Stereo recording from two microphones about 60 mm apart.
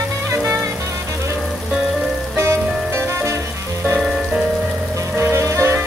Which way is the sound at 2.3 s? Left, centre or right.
Right.